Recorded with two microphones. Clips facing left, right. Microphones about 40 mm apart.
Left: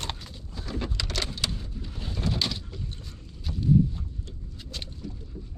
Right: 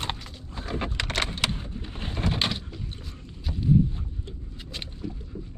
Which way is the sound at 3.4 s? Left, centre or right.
Centre.